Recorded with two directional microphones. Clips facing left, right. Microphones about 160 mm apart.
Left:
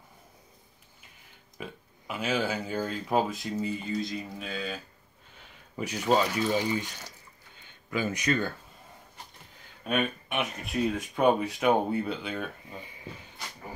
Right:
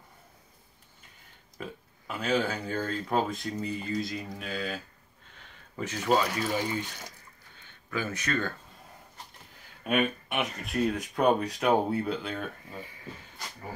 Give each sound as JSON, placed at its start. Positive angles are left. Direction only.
{"t": 1.6, "sound": "speech", "side_deg": 5}
{"t": 5.8, "sound": "speech", "side_deg": 10}
{"t": 6.3, "sound": "speech", "side_deg": -10}
{"t": 7.6, "sound": "speech", "side_deg": 15}
{"t": 9.8, "sound": "speech", "side_deg": -5}